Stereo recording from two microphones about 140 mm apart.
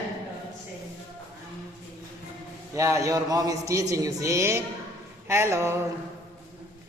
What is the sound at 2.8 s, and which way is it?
A man's voice, 20° right (ahead or behind).